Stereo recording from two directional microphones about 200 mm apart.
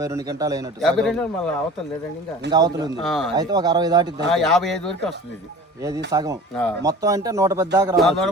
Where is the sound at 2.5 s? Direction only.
20° right (ahead or behind).